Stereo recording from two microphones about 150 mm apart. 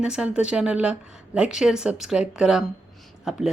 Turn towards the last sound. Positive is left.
turn(degrees=0)  # may be behind; listen again after turning